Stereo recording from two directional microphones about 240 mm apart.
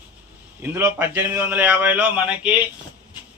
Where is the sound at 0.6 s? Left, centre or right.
Centre.